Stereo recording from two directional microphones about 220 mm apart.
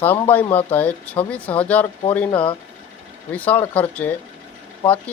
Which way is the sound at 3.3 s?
5° left (ahead or behind).